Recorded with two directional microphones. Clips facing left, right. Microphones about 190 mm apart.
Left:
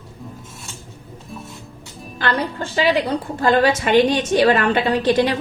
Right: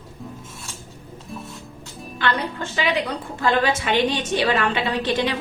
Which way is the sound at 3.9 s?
50° left (ahead or behind).